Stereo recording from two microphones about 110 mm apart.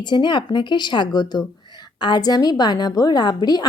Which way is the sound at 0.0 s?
45° left (ahead or behind).